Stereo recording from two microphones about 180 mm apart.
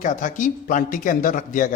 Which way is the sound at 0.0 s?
45° left (ahead or behind).